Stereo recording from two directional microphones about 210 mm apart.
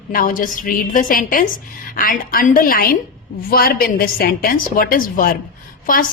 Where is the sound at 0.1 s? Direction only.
40° left (ahead or behind).